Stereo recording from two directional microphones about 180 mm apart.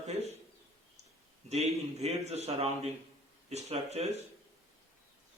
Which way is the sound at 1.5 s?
35° right (ahead or behind).